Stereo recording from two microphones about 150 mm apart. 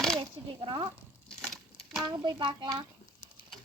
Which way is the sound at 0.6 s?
35° right (ahead or behind).